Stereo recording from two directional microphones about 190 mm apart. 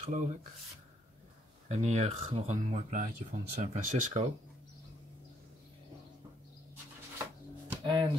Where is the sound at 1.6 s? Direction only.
35° right (ahead or behind).